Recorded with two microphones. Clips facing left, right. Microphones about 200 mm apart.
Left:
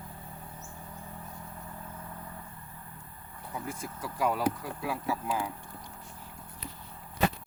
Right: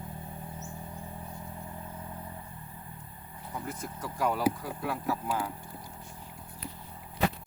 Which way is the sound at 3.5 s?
10° left (ahead or behind).